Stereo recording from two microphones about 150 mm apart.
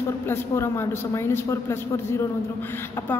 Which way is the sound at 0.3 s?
15° left (ahead or behind).